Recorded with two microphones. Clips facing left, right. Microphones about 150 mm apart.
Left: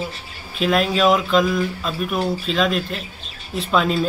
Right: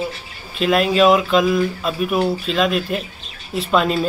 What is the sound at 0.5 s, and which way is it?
Speech, centre (ahead or behind).